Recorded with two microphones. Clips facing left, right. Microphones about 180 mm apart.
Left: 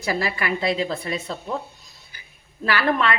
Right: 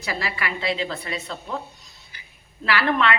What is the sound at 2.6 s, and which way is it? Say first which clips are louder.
Speech: even; 40° left (ahead or behind).